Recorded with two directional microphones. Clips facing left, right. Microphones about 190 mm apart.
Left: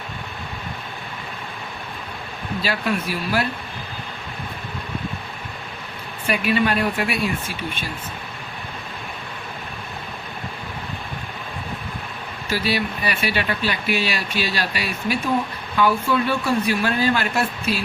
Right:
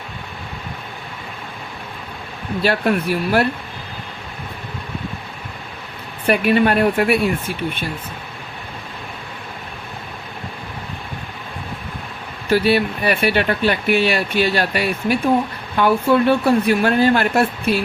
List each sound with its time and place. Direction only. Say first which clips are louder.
2.6 s speech: right 6 dB; 55° right (ahead or behind)
6.2 s speech: right 5 dB; 55° right (ahead or behind)
12.5 s speech: right 8 dB; 55° right (ahead or behind)